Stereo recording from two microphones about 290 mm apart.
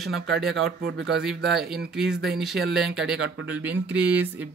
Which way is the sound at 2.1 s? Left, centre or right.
Right.